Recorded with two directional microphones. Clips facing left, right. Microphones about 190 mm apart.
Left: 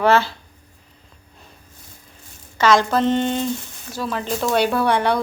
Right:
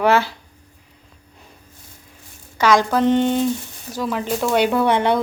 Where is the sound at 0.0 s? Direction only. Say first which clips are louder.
Even; 15° right (ahead or behind).